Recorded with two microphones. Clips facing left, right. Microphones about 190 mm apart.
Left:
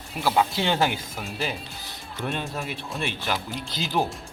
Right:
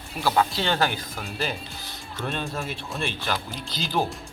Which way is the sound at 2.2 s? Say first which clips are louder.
Even; 15° left (ahead or behind).